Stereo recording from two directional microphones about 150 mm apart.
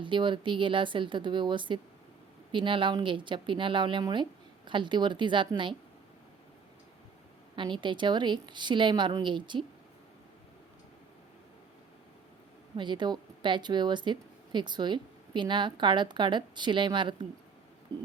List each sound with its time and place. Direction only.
0.0 s speech: 35° right (ahead or behind)
7.5 s speech: 30° right (ahead or behind)
12.7 s speech: 30° right (ahead or behind)
17.9 s a sound: 10° left (ahead or behind)